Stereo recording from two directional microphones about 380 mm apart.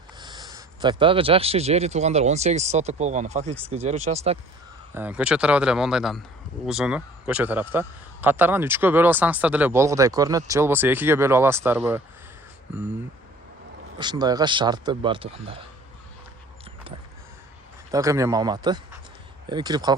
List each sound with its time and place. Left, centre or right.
0.2 s speech: centre
4.9 s a man's voice: centre
14.0 s speech: centre
17.9 s speech: centre